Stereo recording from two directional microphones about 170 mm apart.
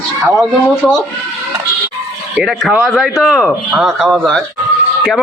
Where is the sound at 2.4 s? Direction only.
Centre (ahead or behind).